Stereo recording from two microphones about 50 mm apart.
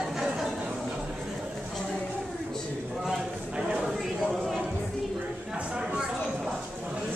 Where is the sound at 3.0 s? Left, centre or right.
Centre.